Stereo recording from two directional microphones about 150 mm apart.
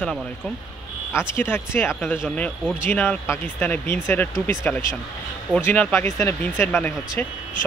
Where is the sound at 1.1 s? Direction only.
15° left (ahead or behind).